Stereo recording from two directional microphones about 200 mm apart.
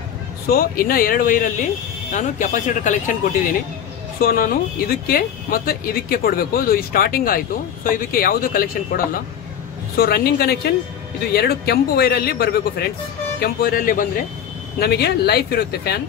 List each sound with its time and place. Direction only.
0.5 s speech: 45° left (ahead or behind)
4.2 s speech: 45° left (ahead or behind)